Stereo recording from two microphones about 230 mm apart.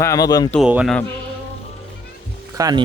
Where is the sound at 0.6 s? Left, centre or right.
Centre.